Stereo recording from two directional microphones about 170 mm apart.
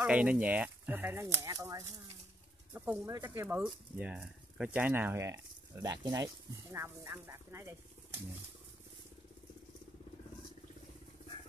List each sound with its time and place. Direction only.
0.0 s speech: 5° right (ahead or behind)